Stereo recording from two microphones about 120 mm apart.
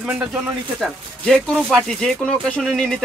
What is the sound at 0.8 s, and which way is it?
Speech, centre (ahead or behind).